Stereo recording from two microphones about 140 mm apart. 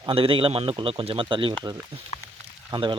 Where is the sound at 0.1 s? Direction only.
40° right (ahead or behind).